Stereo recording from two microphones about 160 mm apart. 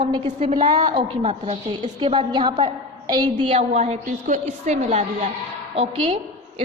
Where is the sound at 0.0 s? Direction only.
30° right (ahead or behind).